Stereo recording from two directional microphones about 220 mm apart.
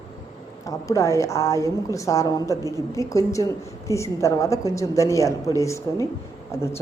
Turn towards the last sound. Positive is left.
turn(degrees=10)  # may be behind; listen again after turning